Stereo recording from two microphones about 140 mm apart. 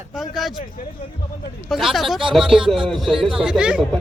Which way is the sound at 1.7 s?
Centre (ahead or behind).